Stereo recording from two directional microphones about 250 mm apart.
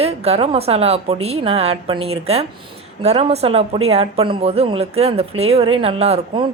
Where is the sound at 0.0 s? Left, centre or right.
Right.